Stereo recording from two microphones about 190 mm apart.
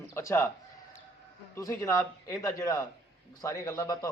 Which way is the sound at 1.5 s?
15° left (ahead or behind).